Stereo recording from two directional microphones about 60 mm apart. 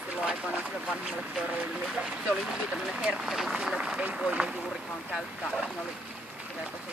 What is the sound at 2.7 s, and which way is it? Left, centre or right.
Speech, centre.